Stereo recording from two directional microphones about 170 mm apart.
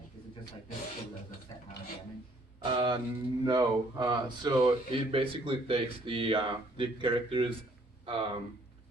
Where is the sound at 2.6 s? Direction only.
25° right (ahead or behind).